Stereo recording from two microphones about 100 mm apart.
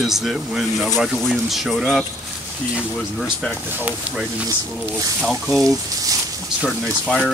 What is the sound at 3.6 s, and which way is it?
Speech, 20° right (ahead or behind).